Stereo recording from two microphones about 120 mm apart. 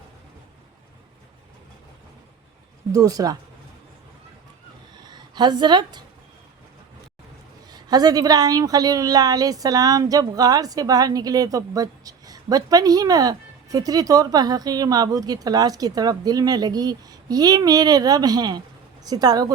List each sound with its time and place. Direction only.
2.9 s speech: 30° right (ahead or behind)
5.0 s a sound: 35° right (ahead or behind)
7.7 s a woman's voice: 35° right (ahead or behind)